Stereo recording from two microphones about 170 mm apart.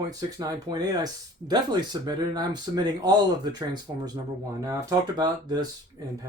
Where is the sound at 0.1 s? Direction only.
20° right (ahead or behind).